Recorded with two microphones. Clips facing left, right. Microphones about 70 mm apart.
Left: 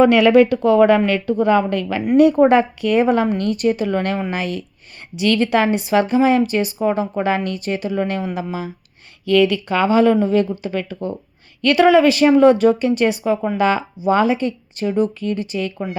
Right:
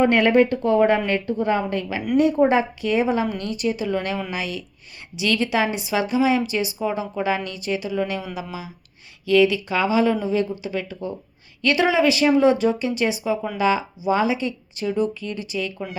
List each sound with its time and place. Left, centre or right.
0.0 s a woman's voice: left